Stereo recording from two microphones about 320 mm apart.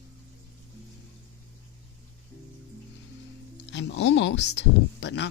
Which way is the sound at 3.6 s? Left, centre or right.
Left.